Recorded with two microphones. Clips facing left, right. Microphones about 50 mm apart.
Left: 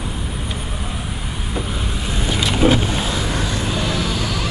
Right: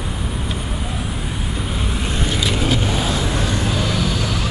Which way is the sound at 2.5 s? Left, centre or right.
Centre.